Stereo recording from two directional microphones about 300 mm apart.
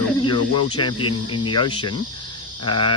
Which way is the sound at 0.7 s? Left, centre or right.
Centre.